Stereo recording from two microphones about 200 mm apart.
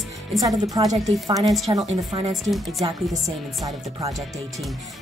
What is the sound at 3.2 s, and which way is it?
Speech, 15° right (ahead or behind).